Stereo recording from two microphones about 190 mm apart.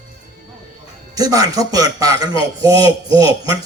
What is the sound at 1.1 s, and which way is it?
A man's voice, 20° right (ahead or behind).